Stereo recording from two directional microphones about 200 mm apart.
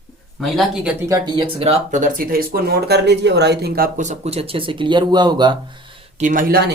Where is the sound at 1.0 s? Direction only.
20° right (ahead or behind).